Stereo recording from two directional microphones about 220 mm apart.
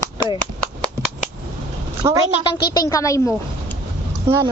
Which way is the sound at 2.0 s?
15° right (ahead or behind).